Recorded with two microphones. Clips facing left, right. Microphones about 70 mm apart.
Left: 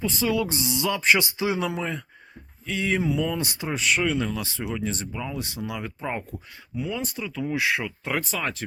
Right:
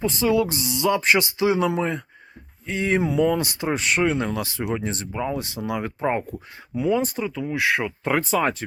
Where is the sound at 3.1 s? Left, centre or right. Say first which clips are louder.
Right 5 dB; right.